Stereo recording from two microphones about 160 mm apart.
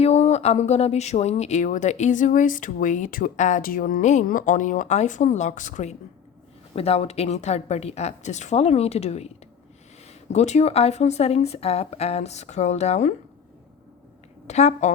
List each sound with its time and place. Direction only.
0.0 s speech: 40° left (ahead or behind)
10.3 s speech: 45° left (ahead or behind)
14.4 s speech: 45° left (ahead or behind)